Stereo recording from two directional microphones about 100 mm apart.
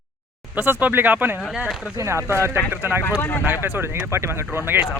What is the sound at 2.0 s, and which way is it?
Speech, 25° right (ahead or behind).